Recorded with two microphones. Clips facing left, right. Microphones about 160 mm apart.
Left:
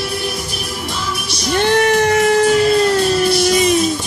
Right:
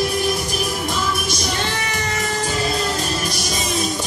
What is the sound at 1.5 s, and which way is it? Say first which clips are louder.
Music: left 11 dB; 60° left (ahead or behind).